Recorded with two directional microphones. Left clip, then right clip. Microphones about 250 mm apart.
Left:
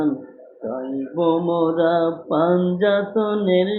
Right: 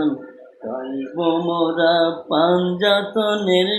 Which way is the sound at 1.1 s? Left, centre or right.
Centre.